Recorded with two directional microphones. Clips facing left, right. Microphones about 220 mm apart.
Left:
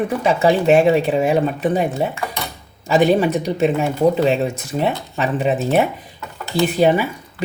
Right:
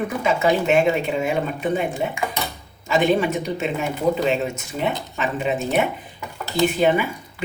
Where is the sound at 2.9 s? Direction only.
35° left (ahead or behind).